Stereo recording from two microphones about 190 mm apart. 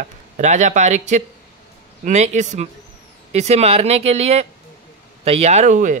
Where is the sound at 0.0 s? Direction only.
40° right (ahead or behind).